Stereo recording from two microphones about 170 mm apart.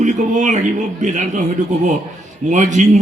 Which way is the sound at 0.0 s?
45° right (ahead or behind).